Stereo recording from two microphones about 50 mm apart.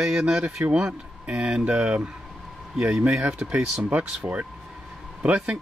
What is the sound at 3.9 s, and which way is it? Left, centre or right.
Speech, right.